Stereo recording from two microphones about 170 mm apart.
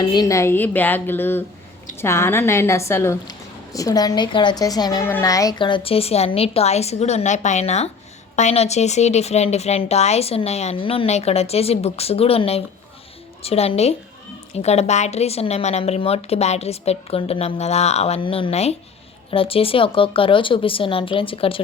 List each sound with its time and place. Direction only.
0.1 s a woman's voice: 20° left (ahead or behind)